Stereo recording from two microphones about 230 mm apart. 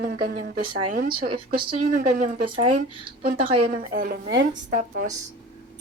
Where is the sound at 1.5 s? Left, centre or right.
Right.